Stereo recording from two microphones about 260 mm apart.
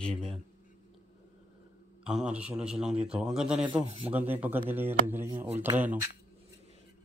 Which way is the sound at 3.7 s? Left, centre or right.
Centre.